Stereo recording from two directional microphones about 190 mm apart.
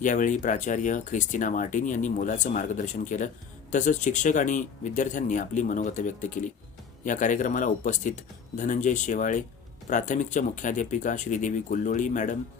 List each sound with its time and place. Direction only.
0.0 s speech: 40° left (ahead or behind)